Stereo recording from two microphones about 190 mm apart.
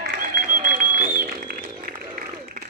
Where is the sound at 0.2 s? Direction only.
45° right (ahead or behind).